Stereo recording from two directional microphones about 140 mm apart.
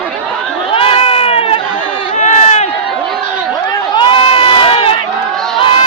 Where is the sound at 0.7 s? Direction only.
40° left (ahead or behind).